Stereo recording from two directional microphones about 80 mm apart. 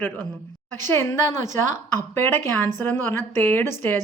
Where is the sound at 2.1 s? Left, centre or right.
Left.